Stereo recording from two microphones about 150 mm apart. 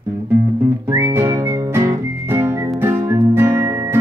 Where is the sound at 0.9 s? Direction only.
20° right (ahead or behind).